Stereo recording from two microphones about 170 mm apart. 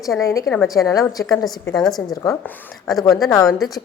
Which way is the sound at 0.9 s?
20° left (ahead or behind).